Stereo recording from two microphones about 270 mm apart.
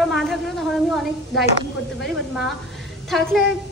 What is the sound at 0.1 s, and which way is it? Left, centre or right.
A woman's voice, centre.